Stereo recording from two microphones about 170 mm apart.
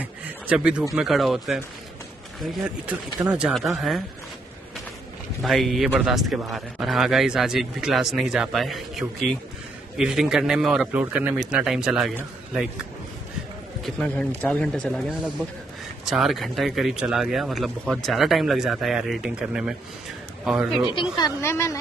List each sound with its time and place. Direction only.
0.0 s a sound: 5° right (ahead or behind)
0.9 s a man's voice: centre (ahead or behind)
5.4 s a man's voice: centre (ahead or behind)
13.8 s a man's voice: 5° left (ahead or behind)
21.2 s a woman's voice: 15° left (ahead or behind)